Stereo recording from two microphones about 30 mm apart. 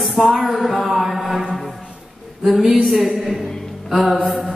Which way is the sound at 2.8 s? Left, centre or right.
Centre.